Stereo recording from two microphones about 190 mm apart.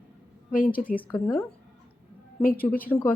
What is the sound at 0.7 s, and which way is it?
Speech, 10° left (ahead or behind).